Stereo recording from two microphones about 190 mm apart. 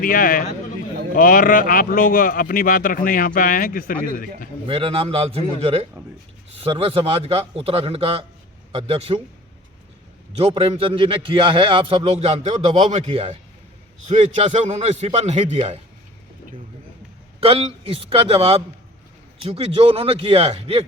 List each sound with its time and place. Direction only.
0.0 s speech: 45° left (ahead or behind)
4.7 s a man's voice: 30° right (ahead or behind)
10.3 s a man's voice: 30° right (ahead or behind)
17.4 s a man's voice: 30° right (ahead or behind)